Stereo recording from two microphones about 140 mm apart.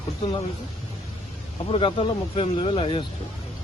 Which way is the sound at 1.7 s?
40° left (ahead or behind).